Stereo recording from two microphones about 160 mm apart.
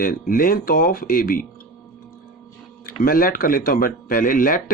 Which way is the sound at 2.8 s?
65° left (ahead or behind).